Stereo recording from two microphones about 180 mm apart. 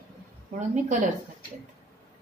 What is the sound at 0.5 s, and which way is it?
Speech, 45° right (ahead or behind).